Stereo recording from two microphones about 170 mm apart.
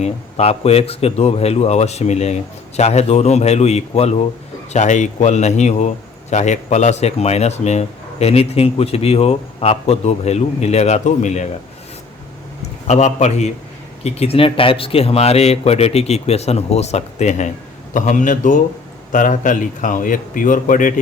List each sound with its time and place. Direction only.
0.0 s speech: 40° left (ahead or behind)
12.9 s speech: 40° left (ahead or behind)